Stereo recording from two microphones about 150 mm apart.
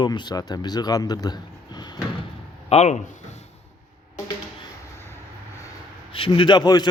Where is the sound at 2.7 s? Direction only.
50° left (ahead or behind).